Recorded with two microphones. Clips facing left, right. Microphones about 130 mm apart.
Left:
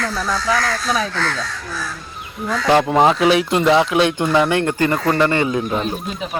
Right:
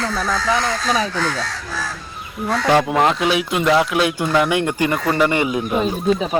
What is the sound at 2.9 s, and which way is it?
Speech, centre (ahead or behind).